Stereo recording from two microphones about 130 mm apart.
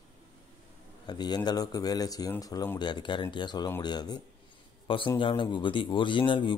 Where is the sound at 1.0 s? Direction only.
30° left (ahead or behind).